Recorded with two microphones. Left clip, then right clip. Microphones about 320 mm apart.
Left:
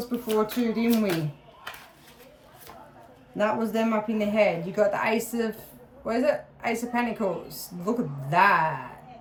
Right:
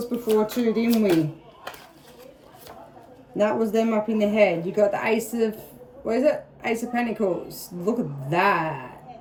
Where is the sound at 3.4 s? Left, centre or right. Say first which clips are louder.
Right 4 dB; centre.